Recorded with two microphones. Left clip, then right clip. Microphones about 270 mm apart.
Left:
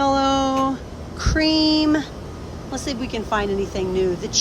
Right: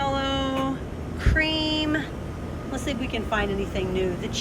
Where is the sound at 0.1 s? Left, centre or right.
Centre.